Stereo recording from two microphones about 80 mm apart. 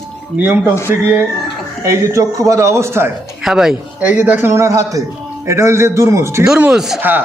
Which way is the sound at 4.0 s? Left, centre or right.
Right.